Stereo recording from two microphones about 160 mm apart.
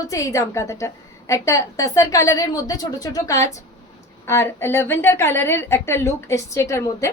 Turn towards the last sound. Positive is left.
turn(degrees=20)  # may be behind; listen again after turning